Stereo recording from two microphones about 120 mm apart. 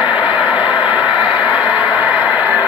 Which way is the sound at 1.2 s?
10° right (ahead or behind).